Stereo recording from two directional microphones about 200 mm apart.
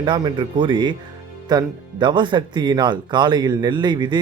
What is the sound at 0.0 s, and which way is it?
A man's voice, 20° right (ahead or behind).